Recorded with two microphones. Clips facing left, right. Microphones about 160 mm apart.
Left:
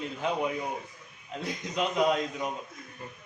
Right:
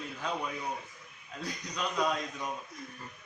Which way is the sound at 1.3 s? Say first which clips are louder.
Left 6 dB; 25° left (ahead or behind).